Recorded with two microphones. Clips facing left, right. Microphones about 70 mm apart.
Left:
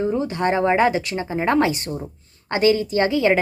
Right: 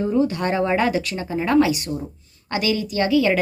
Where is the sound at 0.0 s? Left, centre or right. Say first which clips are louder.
Right 1 dB; left.